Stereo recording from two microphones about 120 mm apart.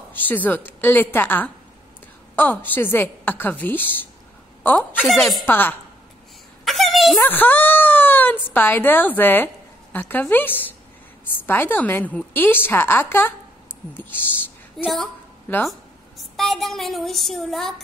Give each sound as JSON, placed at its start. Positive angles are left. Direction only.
{"t": 0.1, "sound": "a woman's voice", "side_deg": 15}
{"t": 5.0, "sound": "a woman's voice", "side_deg": 0}
{"t": 5.5, "sound": "a woman's voice", "side_deg": 15}
{"t": 6.6, "sound": "a sound", "side_deg": 0}
{"t": 7.2, "sound": "a sound", "side_deg": 15}
{"t": 8.5, "sound": "a woman's voice", "side_deg": 15}
{"t": 14.8, "sound": "a woman's voice", "side_deg": 0}
{"t": 15.5, "sound": "a woman's voice", "side_deg": 15}
{"t": 16.2, "sound": "a woman's voice", "side_deg": 0}